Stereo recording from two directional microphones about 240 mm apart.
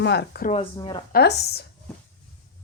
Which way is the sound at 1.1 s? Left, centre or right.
Left.